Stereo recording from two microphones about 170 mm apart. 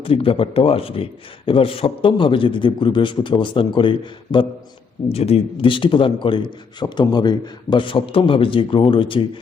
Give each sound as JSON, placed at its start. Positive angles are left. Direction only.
{"t": 0.0, "sound": "a man's voice", "side_deg": 35}